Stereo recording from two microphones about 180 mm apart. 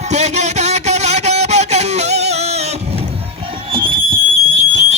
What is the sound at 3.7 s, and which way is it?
Music, 30° right (ahead or behind).